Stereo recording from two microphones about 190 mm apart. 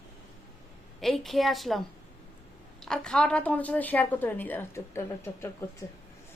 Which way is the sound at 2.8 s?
5° left (ahead or behind).